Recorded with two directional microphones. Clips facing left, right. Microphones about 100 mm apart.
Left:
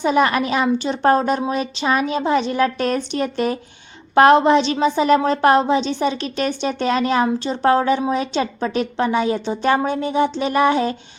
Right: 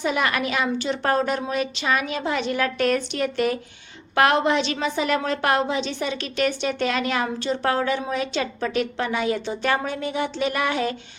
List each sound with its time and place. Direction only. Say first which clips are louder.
0.0 s a woman's voice: left 6 dB; 30° left (ahead or behind)